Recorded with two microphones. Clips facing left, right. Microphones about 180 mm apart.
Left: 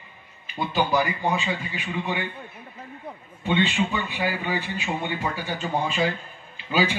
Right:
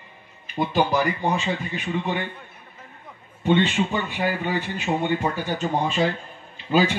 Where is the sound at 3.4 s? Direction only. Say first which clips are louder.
Right 3 dB; 45° right (ahead or behind).